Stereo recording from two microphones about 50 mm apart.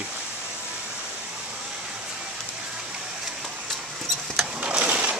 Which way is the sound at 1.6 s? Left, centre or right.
Centre.